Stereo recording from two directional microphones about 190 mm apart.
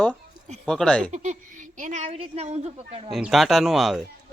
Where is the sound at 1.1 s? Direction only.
40° right (ahead or behind).